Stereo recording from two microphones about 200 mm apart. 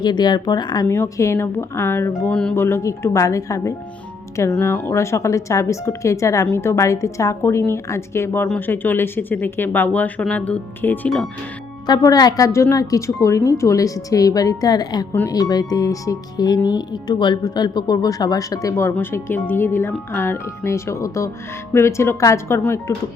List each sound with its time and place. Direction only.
0.0 s speech: 20° left (ahead or behind); by 11.3 s 5° left (ahead or behind)
11.9 s speech: 20° left (ahead or behind)